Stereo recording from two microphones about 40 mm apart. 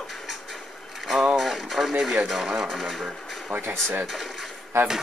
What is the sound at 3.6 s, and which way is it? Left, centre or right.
Speech, right.